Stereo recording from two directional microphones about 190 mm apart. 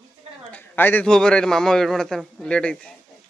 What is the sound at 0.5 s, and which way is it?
Speech, 10° left (ahead or behind).